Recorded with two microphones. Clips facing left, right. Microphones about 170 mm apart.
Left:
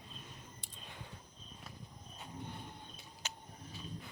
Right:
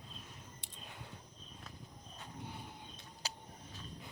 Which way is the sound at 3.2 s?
35° right (ahead or behind).